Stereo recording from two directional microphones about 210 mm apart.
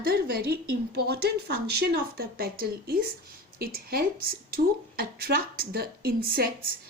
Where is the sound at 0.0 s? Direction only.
45° right (ahead or behind).